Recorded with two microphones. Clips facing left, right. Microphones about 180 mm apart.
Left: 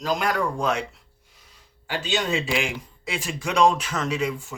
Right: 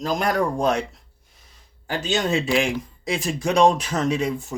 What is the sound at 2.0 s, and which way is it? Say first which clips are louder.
Speech: right 3 dB; 45° right (ahead or behind).